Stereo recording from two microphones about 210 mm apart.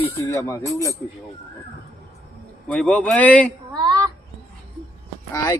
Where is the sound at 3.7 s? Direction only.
20° right (ahead or behind).